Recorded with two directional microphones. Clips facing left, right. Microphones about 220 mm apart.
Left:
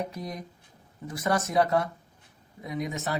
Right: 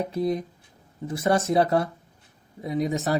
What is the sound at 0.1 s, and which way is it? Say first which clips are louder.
Speech: right 12 dB; 30° right (ahead or behind).